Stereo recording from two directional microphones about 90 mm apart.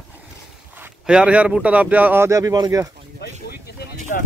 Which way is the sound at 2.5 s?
50° right (ahead or behind).